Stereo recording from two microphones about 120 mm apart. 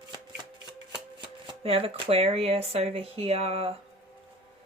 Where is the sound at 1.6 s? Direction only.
55° right (ahead or behind).